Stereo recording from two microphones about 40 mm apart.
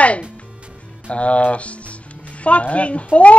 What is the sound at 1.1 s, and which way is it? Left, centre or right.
A man's voice, left.